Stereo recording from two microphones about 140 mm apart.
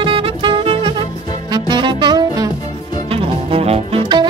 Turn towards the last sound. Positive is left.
turn(degrees=-35)  # may be behind; listen again after turning